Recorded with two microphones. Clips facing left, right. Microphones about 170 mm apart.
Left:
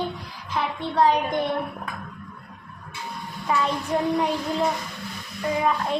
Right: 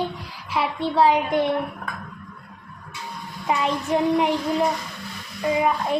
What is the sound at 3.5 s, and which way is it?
A child's voice, 20° right (ahead or behind).